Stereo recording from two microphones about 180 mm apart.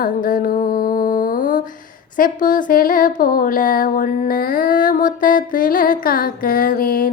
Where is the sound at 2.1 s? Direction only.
50° left (ahead or behind).